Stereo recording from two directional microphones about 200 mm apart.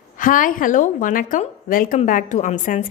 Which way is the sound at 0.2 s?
40° left (ahead or behind).